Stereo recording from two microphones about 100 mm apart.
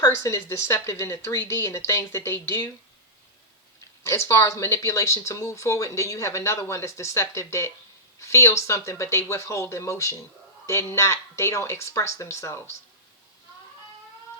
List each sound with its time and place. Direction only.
0.0 s speech: 30° left (ahead or behind)
3.8 s speech: 30° left (ahead or behind)